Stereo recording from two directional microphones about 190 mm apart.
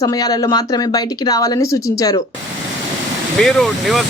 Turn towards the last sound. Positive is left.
turn(degrees=0)  # may be behind; listen again after turning